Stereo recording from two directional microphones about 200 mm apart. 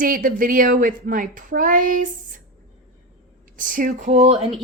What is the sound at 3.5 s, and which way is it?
Speech, 40° right (ahead or behind).